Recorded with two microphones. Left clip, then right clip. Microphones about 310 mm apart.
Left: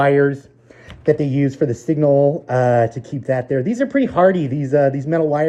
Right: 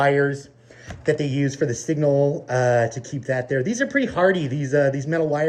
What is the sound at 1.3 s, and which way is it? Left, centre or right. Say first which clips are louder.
Speech: left 4 dB; centre.